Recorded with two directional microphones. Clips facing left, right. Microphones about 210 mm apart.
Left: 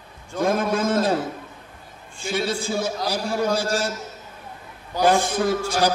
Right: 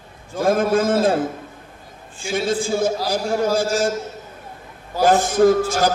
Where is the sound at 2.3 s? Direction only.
50° right (ahead or behind).